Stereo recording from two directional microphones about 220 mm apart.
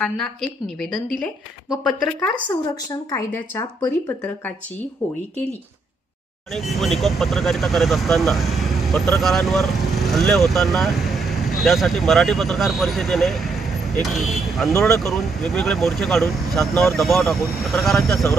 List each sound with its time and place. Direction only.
0.0 s speech: 5° left (ahead or behind)
2.4 s speech: 15° left (ahead or behind)
6.5 s speech: centre (ahead or behind)